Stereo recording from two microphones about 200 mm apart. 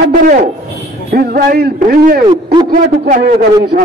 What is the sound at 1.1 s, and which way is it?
A man's voice, 50° right (ahead or behind).